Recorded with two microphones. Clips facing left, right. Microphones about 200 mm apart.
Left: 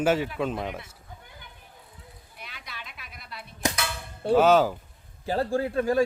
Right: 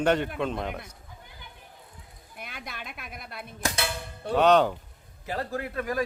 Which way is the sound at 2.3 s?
50° right (ahead or behind).